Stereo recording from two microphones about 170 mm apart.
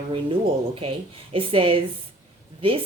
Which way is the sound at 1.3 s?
30° right (ahead or behind).